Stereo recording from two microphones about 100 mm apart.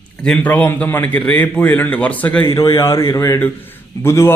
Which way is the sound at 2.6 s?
30° left (ahead or behind).